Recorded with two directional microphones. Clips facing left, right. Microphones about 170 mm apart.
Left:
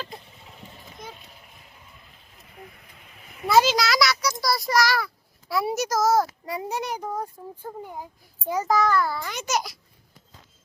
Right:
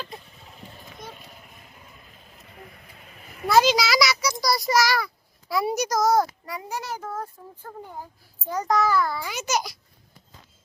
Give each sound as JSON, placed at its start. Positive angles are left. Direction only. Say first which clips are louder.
{"t": 3.4, "sound": "a child's voice", "louder": "even", "side_deg": 0}
{"t": 6.4, "sound": "a child's voice", "louder": "left 4 dB", "side_deg": 25}